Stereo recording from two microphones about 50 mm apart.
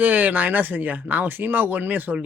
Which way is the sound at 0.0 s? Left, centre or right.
Right.